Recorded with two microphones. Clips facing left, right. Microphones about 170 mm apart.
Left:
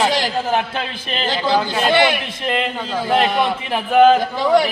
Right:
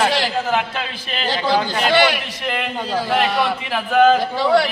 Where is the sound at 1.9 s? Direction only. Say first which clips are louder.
Even; 20° left (ahead or behind).